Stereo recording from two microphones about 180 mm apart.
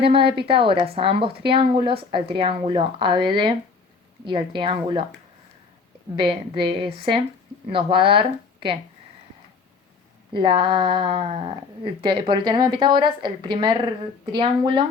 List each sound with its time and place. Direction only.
0.0 s a woman's voice: 30° right (ahead or behind)
6.1 s a woman's voice: 25° right (ahead or behind)
10.3 s a woman's voice: 25° right (ahead or behind)